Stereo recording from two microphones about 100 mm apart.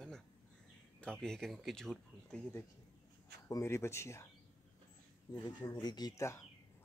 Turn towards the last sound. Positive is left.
turn(degrees=30)  # may be behind; listen again after turning